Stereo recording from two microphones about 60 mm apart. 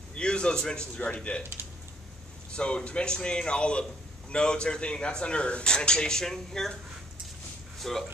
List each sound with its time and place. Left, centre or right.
0.1 s a man's voice: centre
2.5 s speech: centre
7.8 s speech: centre